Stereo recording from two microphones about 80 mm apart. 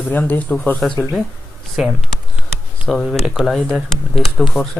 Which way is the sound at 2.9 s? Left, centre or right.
Centre.